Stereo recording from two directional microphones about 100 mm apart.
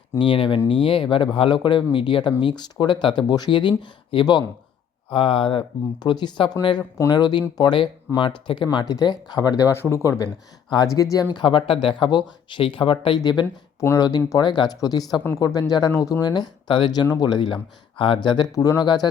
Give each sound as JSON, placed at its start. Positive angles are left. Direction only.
{"t": 0.2, "sound": "speech", "side_deg": 60}
{"t": 5.1, "sound": "speech", "side_deg": 60}
{"t": 6.0, "sound": "speech", "side_deg": 45}
{"t": 11.3, "sound": "speech", "side_deg": 60}
{"t": 13.1, "sound": "speech", "side_deg": 45}
{"t": 13.7, "sound": "speech", "side_deg": 35}
{"t": 18.5, "sound": "speech", "side_deg": 35}